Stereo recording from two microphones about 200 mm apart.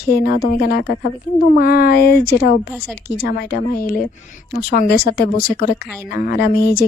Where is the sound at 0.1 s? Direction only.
50° left (ahead or behind).